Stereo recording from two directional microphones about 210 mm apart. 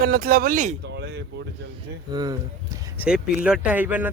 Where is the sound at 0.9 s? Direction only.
55° right (ahead or behind).